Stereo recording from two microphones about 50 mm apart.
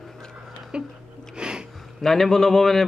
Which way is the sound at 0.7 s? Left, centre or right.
Right.